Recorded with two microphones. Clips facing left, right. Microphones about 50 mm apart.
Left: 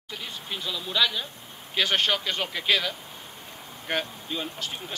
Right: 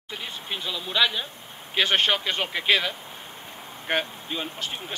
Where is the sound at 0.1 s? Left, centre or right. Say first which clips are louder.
Right 2 dB; centre.